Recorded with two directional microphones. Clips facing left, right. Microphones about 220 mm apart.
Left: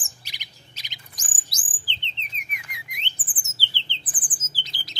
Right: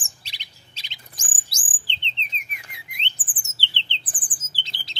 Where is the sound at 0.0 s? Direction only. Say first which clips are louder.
Left 1 dB; 30° right (ahead or behind).